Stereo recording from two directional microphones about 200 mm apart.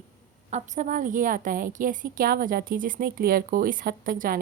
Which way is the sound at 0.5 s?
40° right (ahead or behind).